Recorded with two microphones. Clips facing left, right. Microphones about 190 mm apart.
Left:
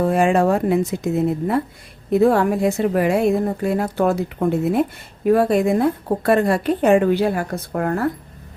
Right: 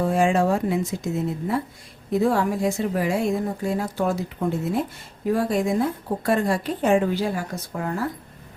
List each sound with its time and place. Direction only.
0.0 s a woman's voice: 60° left (ahead or behind)